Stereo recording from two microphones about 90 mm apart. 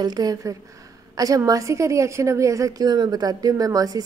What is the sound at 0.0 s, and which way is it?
A woman's voice, 45° right (ahead or behind).